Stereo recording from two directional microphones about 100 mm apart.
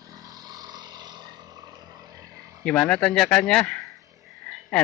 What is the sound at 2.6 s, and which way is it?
Speech, 10° left (ahead or behind).